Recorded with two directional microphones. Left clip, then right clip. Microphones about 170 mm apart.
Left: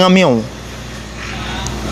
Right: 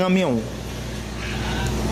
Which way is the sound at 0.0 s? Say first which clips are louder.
Left 10 dB; 30° left (ahead or behind).